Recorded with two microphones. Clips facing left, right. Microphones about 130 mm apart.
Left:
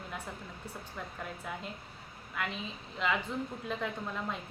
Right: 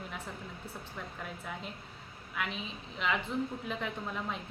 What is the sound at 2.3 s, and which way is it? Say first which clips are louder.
Speech: even; centre (ahead or behind).